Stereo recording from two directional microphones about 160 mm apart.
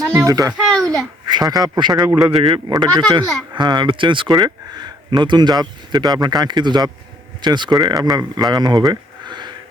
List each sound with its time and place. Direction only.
0.3 s speech: 20° right (ahead or behind)
0.5 s a sound: 5° left (ahead or behind)
1.3 s speech: 25° right (ahead or behind)